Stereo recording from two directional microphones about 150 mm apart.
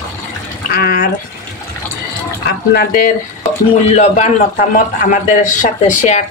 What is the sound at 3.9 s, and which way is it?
Speech, 45° left (ahead or behind).